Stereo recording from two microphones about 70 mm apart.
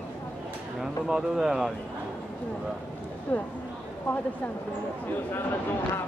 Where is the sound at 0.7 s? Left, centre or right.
Centre.